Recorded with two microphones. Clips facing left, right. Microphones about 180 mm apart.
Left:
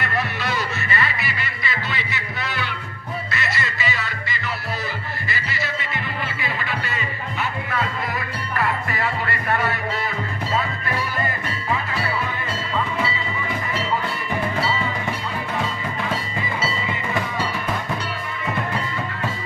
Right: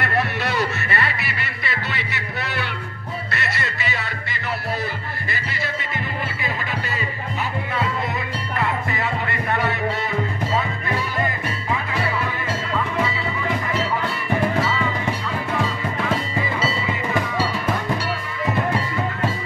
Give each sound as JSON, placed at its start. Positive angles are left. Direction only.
{"t": 0.0, "sound": "music", "side_deg": -55}
{"t": 1.9, "sound": "a sound", "side_deg": -60}
{"t": 3.3, "sound": "music", "side_deg": -60}
{"t": 8.5, "sound": "music", "side_deg": -20}